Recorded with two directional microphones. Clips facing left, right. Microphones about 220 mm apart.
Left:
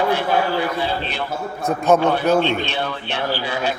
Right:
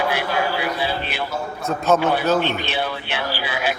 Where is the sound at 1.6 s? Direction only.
15° left (ahead or behind).